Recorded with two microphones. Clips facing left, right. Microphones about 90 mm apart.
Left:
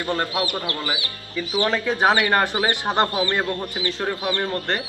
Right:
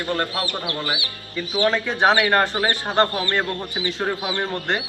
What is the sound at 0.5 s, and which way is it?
Speech, 10° right (ahead or behind).